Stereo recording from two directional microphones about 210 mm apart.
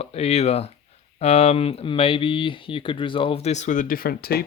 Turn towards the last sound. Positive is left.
turn(degrees=50)  # may be behind; listen again after turning